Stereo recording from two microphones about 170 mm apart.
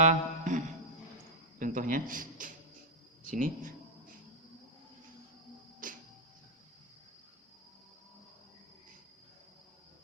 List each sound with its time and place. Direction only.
0.0 s music: 45° right (ahead or behind)
1.5 s a man's voice: 50° right (ahead or behind)
5.8 s music: 50° right (ahead or behind)